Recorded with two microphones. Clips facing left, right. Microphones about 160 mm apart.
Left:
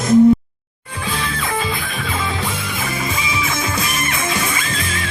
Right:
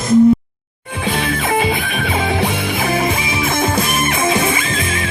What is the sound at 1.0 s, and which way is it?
Music, 60° right (ahead or behind).